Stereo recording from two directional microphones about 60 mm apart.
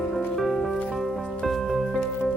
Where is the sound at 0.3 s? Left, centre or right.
Centre.